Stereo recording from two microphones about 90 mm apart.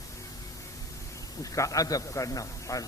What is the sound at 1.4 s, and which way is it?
A man's voice, 40° left (ahead or behind).